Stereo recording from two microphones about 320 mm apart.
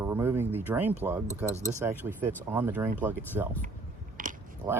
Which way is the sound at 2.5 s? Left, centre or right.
Centre.